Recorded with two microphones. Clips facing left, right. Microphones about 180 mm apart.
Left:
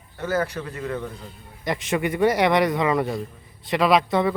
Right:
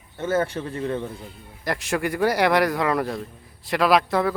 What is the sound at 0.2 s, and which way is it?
Speech, 25° right (ahead or behind).